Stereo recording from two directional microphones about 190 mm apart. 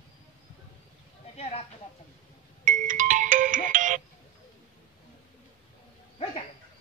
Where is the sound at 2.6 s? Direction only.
45° right (ahead or behind).